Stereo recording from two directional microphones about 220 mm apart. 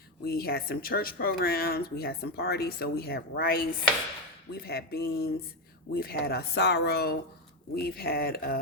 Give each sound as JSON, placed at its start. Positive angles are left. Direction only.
{"t": 0.3, "sound": "speech", "side_deg": 45}